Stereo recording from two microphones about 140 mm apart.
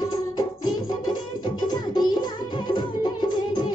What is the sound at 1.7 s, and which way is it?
Music, 30° left (ahead or behind).